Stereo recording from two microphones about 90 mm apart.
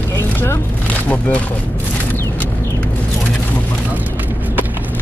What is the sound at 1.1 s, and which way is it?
Speech, 15° left (ahead or behind).